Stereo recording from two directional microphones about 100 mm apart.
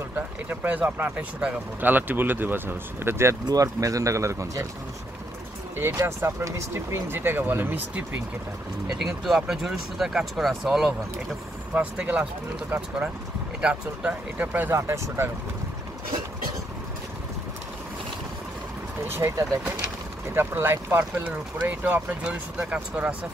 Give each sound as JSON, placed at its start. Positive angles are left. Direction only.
{"t": 0.1, "sound": "speech", "side_deg": -15}
{"t": 3.4, "sound": "speech", "side_deg": -35}
{"t": 5.9, "sound": "speech", "side_deg": -30}
{"t": 8.8, "sound": "speech", "side_deg": -5}
{"t": 13.6, "sound": "speech", "side_deg": -10}
{"t": 19.0, "sound": "speech", "side_deg": -25}